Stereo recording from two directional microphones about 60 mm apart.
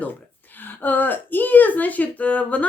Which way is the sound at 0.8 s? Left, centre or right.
Left.